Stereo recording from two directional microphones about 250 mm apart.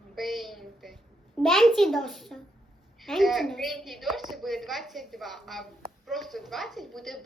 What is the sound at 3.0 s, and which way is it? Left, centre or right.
A woman's voice, centre.